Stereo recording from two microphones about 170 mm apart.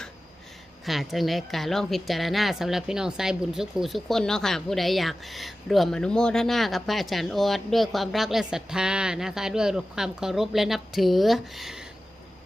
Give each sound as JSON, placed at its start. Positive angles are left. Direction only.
{"t": 0.9, "sound": "speech", "side_deg": 0}